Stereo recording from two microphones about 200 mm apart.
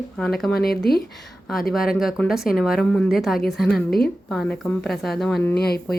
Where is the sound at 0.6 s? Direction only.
50° left (ahead or behind).